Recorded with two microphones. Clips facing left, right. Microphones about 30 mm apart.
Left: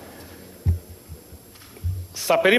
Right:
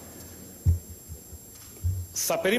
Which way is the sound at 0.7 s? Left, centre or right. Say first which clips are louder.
Left 2 dB; left.